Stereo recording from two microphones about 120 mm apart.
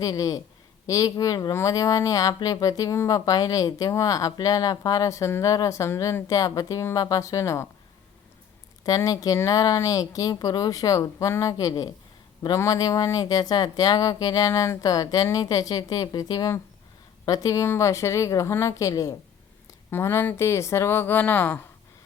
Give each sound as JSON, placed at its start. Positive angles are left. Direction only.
{"t": 0.0, "sound": "speech", "side_deg": 30}
{"t": 8.8, "sound": "speech", "side_deg": 30}